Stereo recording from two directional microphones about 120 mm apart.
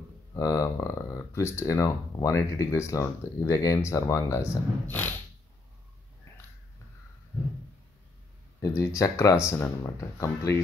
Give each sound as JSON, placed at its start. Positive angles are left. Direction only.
{"t": 0.3, "sound": "speech", "side_deg": 25}
{"t": 4.8, "sound": "a sound", "side_deg": 15}
{"t": 8.5, "sound": "speech", "side_deg": 25}